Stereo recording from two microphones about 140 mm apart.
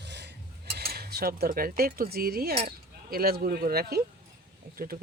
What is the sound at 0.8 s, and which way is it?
Cutlery, 90° right.